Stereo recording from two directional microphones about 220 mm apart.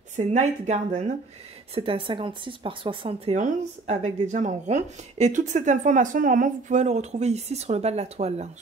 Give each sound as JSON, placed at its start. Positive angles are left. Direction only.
{"t": 0.1, "sound": "a woman's voice", "side_deg": -30}